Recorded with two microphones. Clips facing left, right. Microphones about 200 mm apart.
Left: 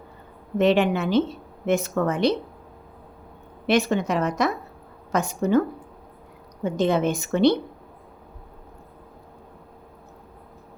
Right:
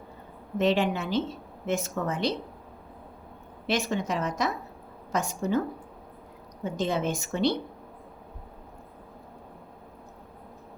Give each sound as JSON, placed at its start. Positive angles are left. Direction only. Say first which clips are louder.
{"t": 0.6, "sound": "a woman's voice", "louder": "left 5 dB", "side_deg": 60}
{"t": 3.7, "sound": "a woman's voice", "louder": "left 7 dB", "side_deg": 65}
{"t": 6.7, "sound": "a woman's voice", "louder": "left 6 dB", "side_deg": 65}